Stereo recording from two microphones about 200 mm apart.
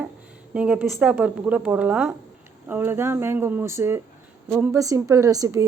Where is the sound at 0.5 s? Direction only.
5° right (ahead or behind).